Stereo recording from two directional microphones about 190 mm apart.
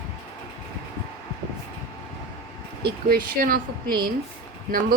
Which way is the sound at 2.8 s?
50° right (ahead or behind).